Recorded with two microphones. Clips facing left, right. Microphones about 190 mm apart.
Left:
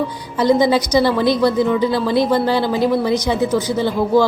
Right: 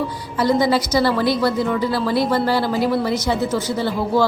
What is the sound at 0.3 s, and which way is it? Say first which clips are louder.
A woman's voice: left 3 dB; 20° left (ahead or behind).